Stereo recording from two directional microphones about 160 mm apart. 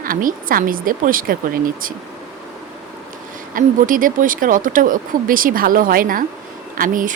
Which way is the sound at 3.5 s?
60° right (ahead or behind).